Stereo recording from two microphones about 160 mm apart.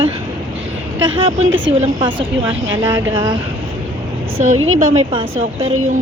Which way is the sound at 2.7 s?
20° right (ahead or behind).